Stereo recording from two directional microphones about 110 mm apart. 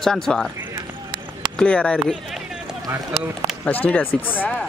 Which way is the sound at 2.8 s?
20° right (ahead or behind).